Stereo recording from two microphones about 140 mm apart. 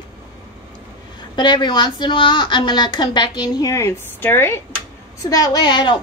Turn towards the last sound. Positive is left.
turn(degrees=30)  # may be behind; listen again after turning